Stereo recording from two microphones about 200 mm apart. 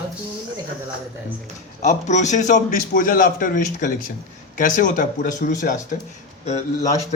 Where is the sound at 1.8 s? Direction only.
35° left (ahead or behind).